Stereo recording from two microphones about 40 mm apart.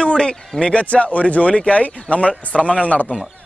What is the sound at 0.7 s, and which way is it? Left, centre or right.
Speech, left.